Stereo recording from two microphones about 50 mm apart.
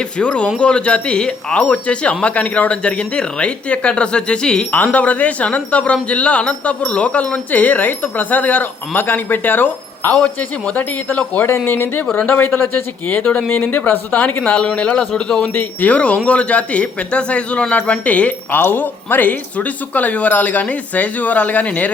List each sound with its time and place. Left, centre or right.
0.2 s speech: left
1.6 s speech: left
4.7 s speech: left
10.8 s speech: left
14.4 s a man's voice: centre
15.5 s speech: left
18.5 s speech: left